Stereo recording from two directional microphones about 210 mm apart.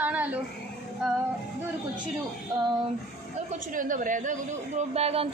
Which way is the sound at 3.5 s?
40° right (ahead or behind).